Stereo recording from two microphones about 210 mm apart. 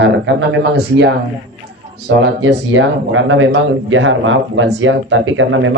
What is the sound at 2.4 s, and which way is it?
Speech, 65° right (ahead or behind).